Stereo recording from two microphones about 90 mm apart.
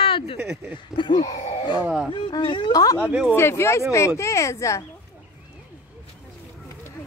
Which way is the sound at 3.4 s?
30° left (ahead or behind).